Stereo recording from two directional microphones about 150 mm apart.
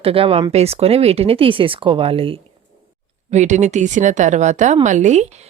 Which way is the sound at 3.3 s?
50° right (ahead or behind).